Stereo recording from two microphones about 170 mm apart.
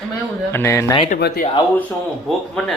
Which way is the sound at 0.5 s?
15° left (ahead or behind).